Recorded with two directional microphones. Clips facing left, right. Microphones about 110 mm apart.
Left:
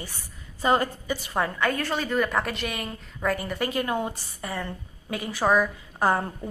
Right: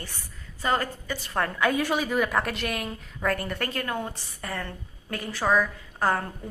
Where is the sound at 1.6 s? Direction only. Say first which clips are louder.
Right 2 dB; 5° right (ahead or behind).